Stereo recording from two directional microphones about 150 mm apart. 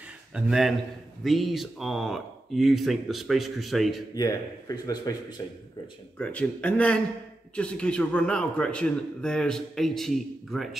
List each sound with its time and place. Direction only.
0.3 s a man's voice: centre (ahead or behind)
4.1 s a man's voice: 25° left (ahead or behind)
6.1 s a man's voice: 10° left (ahead or behind)